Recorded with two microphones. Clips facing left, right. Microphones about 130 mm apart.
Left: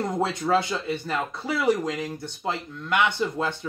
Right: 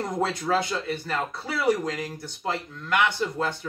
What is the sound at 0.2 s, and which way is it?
Speech, 25° left (ahead or behind).